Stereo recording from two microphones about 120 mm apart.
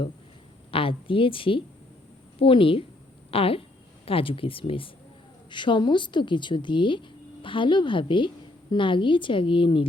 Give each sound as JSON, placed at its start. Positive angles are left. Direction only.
{"t": 0.7, "sound": "a woman's voice", "side_deg": 50}